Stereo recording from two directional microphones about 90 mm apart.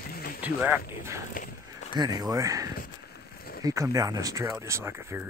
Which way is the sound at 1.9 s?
50° right (ahead or behind).